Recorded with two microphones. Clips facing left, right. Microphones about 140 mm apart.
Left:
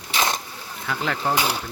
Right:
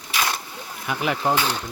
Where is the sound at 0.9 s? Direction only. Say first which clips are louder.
Right 2 dB; 15° right (ahead or behind).